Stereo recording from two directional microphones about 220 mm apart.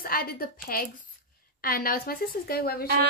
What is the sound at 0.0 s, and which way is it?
A woman's voice, 40° left (ahead or behind).